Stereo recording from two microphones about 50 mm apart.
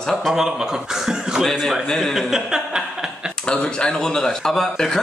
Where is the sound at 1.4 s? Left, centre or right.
Centre.